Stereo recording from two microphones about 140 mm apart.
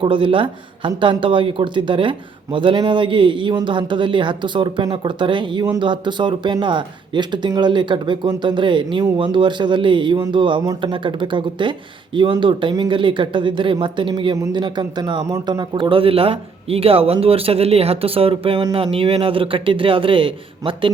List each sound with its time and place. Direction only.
0.0 s speech: 40° right (ahead or behind)
15.7 s speech: 35° right (ahead or behind)